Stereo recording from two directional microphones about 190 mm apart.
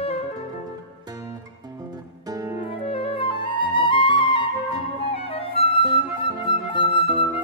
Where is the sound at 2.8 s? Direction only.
30° left (ahead or behind).